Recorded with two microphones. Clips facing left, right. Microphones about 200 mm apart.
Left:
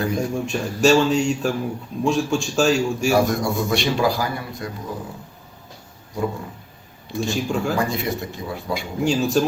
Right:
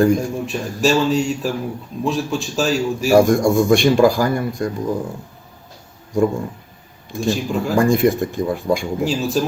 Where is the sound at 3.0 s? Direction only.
50° right (ahead or behind).